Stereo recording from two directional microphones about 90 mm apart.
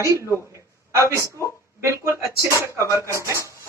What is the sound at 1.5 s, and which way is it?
Speech, 30° right (ahead or behind).